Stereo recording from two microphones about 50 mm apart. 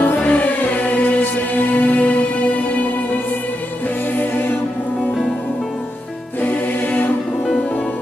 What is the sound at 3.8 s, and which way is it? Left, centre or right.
Music, left.